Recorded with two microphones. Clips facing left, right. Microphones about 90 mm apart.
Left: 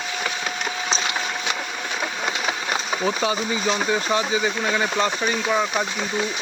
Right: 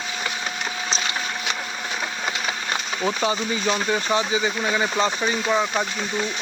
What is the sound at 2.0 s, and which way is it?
Speech, 5° left (ahead or behind).